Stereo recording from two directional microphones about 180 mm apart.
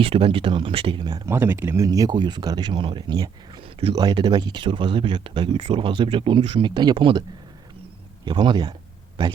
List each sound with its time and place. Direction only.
0.0 s speech: 30° right (ahead or behind)